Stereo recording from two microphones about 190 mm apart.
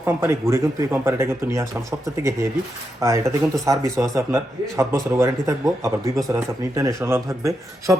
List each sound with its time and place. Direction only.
0.0 s a man's voice: 15° right (ahead or behind)
3.0 s a man's voice: 15° right (ahead or behind)